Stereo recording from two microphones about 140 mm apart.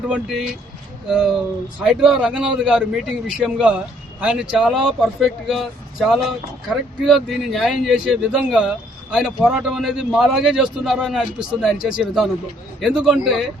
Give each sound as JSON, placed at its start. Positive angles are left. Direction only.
{"t": 0.1, "sound": "a man's voice", "side_deg": 0}
{"t": 6.7, "sound": "a man's voice", "side_deg": 0}